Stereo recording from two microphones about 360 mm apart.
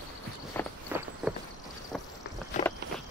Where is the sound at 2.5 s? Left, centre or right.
Centre.